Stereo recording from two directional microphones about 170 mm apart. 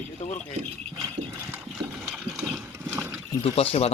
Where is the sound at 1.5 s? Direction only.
5° right (ahead or behind).